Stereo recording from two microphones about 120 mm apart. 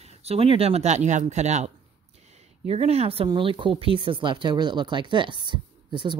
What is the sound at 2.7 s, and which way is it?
Speech, 55° right (ahead or behind).